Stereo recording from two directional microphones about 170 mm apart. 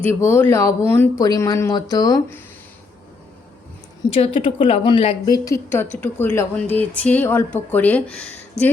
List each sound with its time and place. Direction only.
0.0 s speech: 15° left (ahead or behind)
4.1 s a woman's voice: 35° left (ahead or behind); by 8.7 s 10° left (ahead or behind)